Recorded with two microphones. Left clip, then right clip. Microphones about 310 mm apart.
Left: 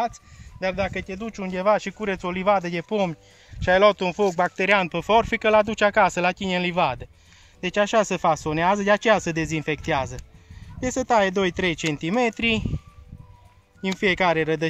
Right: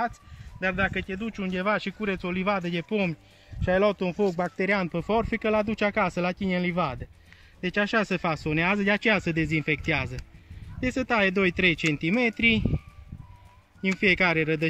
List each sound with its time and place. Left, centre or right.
0.6 s speech: centre
13.9 s speech: left